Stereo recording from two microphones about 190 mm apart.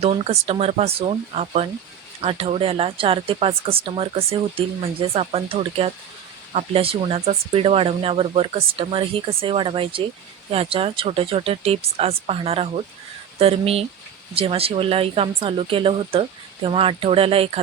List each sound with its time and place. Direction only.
0.0 s speech: 30° right (ahead or behind)